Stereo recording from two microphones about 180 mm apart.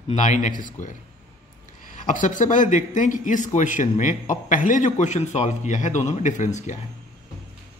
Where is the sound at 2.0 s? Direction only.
45° left (ahead or behind).